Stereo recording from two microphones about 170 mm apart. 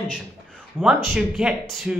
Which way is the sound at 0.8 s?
5° right (ahead or behind).